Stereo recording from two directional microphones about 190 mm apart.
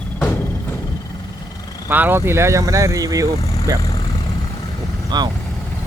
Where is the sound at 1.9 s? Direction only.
10° right (ahead or behind).